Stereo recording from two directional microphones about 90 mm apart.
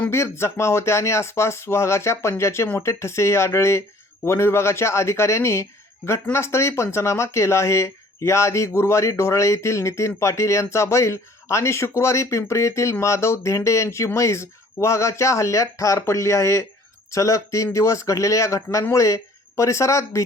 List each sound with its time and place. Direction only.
0.0 s speech: 30° left (ahead or behind)